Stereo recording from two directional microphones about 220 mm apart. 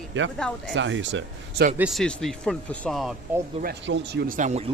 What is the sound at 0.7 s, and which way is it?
Speech, 55° right (ahead or behind).